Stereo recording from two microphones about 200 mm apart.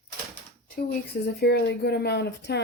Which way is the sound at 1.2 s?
55° left (ahead or behind).